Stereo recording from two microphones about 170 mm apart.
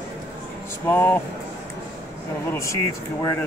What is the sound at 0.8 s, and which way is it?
Speech, 10° left (ahead or behind).